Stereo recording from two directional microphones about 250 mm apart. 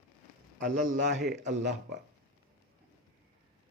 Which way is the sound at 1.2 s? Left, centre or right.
Right.